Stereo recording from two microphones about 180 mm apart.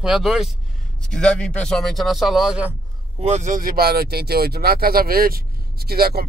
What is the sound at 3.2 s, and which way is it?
Speech, 40° right (ahead or behind).